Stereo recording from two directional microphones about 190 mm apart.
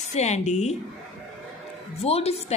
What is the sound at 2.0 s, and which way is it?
Speech, 35° left (ahead or behind).